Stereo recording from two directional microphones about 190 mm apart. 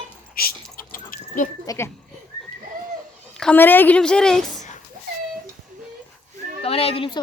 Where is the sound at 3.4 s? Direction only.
10° left (ahead or behind).